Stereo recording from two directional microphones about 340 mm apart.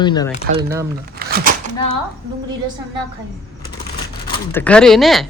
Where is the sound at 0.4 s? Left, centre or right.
Right.